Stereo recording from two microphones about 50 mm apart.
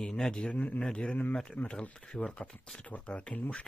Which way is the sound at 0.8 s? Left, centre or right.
Centre.